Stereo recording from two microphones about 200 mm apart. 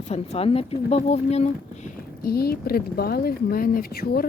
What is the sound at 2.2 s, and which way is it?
Speech, 50° left (ahead or behind).